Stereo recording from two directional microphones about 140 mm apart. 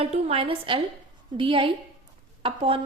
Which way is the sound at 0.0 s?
45° right (ahead or behind).